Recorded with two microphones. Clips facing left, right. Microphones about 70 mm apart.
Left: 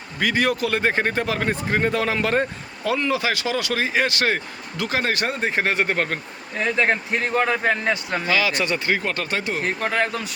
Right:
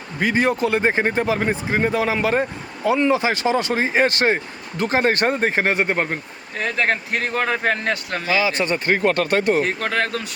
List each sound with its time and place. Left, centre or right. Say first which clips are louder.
0.2 s speech: right 2 dB; right; by 2.9 s centre
2.9 s speech: right 4 dB; right
5.8 s speech: right 1 dB; centre
6.6 s a man's voice: left 1 dB; centre
8.3 s speech: right 2 dB; right
8.6 s speech: right 4 dB; right
9.6 s speech: even; centre